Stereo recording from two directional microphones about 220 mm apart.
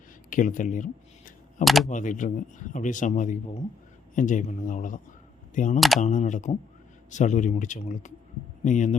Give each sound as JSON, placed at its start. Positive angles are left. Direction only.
{"t": 0.3, "sound": "a sound", "side_deg": 35}
{"t": 1.6, "sound": "speech", "side_deg": 0}
{"t": 1.9, "sound": "speech", "side_deg": 35}